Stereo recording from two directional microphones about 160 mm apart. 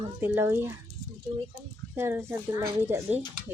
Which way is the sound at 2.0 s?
15° right (ahead or behind).